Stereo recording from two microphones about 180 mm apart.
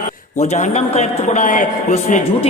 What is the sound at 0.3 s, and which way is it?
A man's voice, 40° left (ahead or behind).